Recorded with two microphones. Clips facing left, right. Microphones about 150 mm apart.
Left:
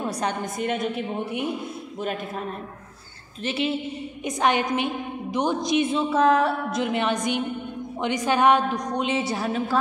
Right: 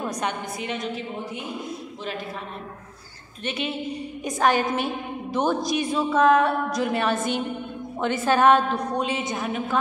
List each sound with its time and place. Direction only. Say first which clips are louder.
0.6 s a woman's voice: left 4 dB; 55° left (ahead or behind)
3.4 s a woman's voice: left 3 dB; 30° left (ahead or behind)